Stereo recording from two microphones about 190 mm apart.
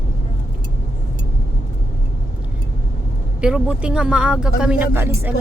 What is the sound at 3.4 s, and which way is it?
Speech, 5° right (ahead or behind).